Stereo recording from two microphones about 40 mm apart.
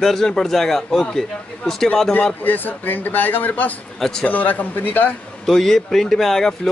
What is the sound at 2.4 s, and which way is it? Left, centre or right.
A man's voice, left.